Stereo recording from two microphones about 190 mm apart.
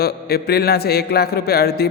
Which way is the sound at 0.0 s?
55° left (ahead or behind).